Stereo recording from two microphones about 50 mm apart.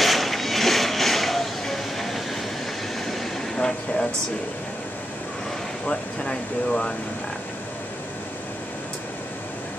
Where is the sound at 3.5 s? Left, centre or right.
Centre.